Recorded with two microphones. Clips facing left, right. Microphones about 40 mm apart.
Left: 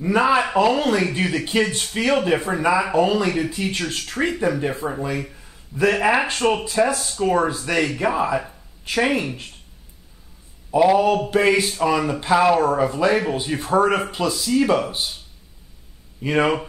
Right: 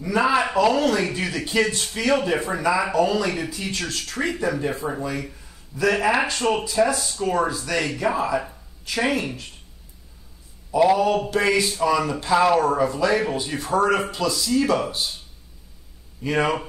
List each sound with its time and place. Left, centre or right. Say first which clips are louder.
0.0 s speech: left 2 dB; left
0.7 s speech: left 1 dB; left
10.7 s speech: left 2 dB; left
16.2 s speech: left 3 dB; left